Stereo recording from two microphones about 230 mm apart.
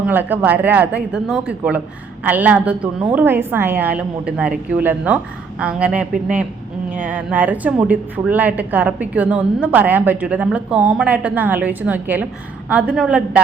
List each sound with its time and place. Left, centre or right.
0.0 s a woman's voice: centre